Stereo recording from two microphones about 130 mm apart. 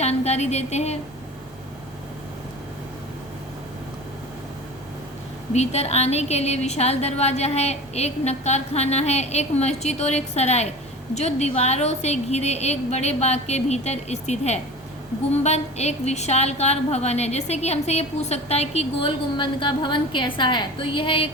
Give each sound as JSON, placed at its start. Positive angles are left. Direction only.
{"t": 0.0, "sound": "a woman's voice", "side_deg": 55}
{"t": 5.5, "sound": "a woman's voice", "side_deg": 55}